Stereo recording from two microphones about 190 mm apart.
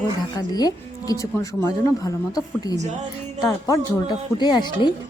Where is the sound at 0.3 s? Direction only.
20° left (ahead or behind).